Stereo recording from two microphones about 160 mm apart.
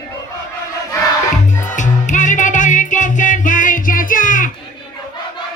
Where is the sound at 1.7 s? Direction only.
50° left (ahead or behind).